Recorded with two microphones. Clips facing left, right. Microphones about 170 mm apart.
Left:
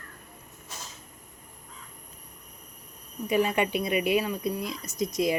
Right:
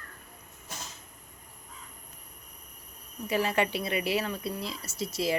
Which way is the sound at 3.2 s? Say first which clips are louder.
Left 3 dB; 20° left (ahead or behind).